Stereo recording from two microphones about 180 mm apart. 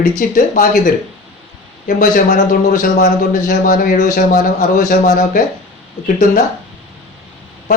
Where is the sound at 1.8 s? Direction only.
50° left (ahead or behind).